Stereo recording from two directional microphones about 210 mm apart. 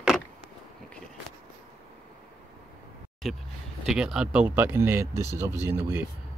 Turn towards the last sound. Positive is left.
turn(degrees=-10)  # may be behind; listen again after turning